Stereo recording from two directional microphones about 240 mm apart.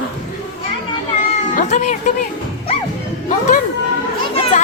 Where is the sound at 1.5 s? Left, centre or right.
Left.